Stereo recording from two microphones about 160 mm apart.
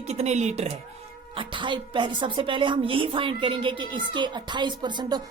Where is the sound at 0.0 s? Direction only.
40° right (ahead or behind).